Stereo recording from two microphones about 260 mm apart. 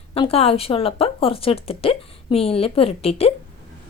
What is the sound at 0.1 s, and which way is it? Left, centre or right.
Speech, left.